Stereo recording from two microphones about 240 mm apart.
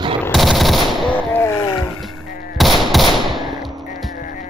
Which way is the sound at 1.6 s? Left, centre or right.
Left.